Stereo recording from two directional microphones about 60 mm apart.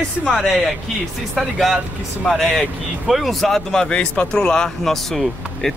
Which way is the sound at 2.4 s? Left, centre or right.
Centre.